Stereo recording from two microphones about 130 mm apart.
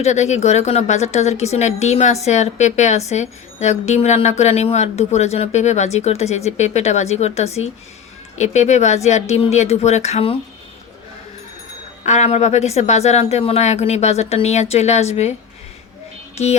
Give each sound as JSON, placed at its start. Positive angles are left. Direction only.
{"t": 0.0, "sound": "speech", "side_deg": 60}
{"t": 12.0, "sound": "speech", "side_deg": 60}
{"t": 16.4, "sound": "speech", "side_deg": 55}